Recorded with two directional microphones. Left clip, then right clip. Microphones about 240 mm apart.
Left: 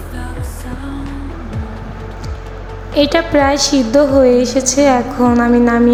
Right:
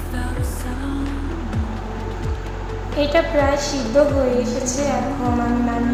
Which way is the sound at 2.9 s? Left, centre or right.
Left.